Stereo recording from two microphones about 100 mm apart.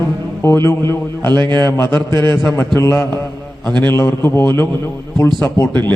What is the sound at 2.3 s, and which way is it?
A man's voice, 15° left (ahead or behind).